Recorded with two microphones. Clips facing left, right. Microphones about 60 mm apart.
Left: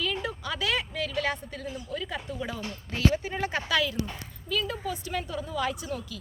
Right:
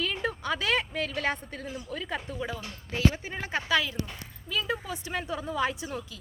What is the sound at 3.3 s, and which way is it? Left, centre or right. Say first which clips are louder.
A woman's voice: even; centre.